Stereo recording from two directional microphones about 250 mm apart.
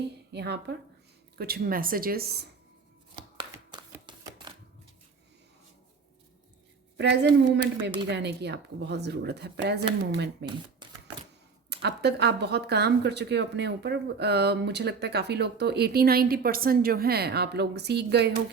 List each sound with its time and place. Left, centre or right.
0.3 s speech: right
3.3 s a sound: centre
6.9 s speech: right
11.7 s speech: right